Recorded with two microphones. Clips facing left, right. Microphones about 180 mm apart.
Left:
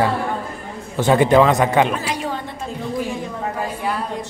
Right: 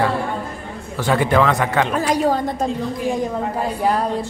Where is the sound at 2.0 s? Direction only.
40° right (ahead or behind).